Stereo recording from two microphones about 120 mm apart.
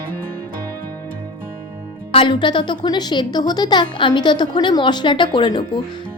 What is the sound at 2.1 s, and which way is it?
A woman's voice, 40° left (ahead or behind).